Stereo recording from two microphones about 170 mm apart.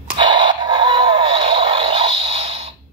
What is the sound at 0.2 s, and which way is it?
Music, 25° right (ahead or behind).